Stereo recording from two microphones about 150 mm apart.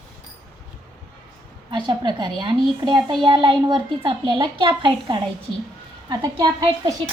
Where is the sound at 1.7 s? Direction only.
30° right (ahead or behind).